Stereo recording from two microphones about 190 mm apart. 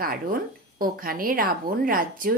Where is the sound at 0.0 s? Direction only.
50° right (ahead or behind).